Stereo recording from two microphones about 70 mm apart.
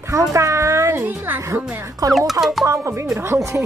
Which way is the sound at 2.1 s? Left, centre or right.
Centre.